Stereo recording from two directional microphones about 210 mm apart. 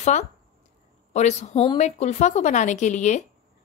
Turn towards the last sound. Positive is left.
turn(degrees=35)  # may be behind; listen again after turning